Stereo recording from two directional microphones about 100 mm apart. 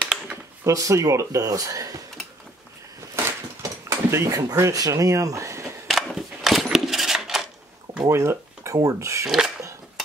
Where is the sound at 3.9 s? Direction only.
30° right (ahead or behind).